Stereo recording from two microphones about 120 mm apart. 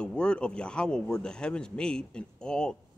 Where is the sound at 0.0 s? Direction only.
10° left (ahead or behind).